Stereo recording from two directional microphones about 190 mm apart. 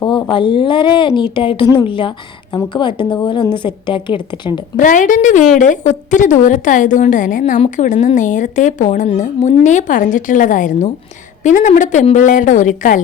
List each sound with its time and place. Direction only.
0.0 s a woman's voice: 25° left (ahead or behind)
4.8 s a woman's voice: 45° left (ahead or behind)